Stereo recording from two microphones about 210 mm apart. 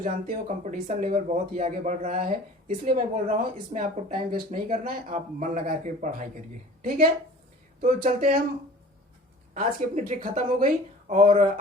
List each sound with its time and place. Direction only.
0.0 s speech: 35° right (ahead or behind)
9.6 s speech: 40° right (ahead or behind)